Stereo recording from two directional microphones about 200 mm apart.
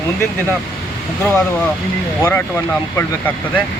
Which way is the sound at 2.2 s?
10° left (ahead or behind).